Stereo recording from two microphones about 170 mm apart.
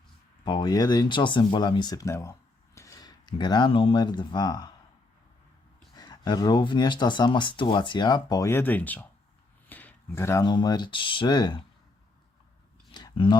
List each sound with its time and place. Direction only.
0.4 s speech: 25° left (ahead or behind)
6.0 s speech: 25° left (ahead or behind)
12.9 s a sound: 25° left (ahead or behind)